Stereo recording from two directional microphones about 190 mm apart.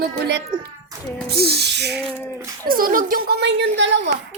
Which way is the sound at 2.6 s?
50° right (ahead or behind).